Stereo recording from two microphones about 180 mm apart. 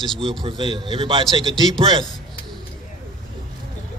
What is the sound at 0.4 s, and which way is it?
A man's voice, 25° right (ahead or behind).